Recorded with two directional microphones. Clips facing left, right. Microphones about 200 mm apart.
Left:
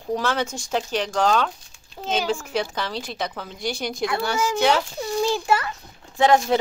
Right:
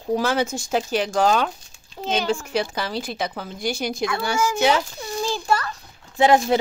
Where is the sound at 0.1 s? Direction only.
10° right (ahead or behind).